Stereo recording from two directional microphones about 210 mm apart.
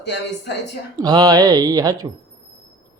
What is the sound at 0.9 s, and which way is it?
Speech, 20° right (ahead or behind).